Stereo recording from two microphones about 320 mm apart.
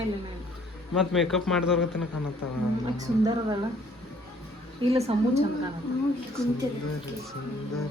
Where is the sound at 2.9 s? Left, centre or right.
Centre.